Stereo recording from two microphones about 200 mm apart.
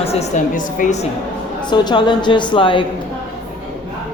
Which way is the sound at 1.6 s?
20° left (ahead or behind).